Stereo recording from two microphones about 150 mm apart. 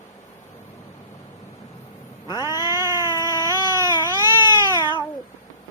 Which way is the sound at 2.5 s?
25° left (ahead or behind).